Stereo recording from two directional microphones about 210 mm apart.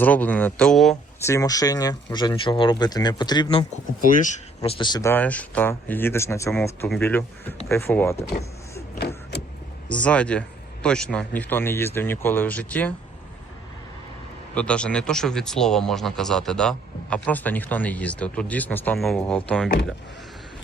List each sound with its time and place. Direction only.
0.0 s speech: 10° left (ahead or behind)
1.2 s speech: 15° left (ahead or behind)
4.0 s speech: 40° left (ahead or behind); by 8.1 s 10° left (ahead or behind)
9.0 s vehicle: 50° left (ahead or behind)
9.9 s speech: 5° left (ahead or behind)
14.5 s speech: 5° left (ahead or behind)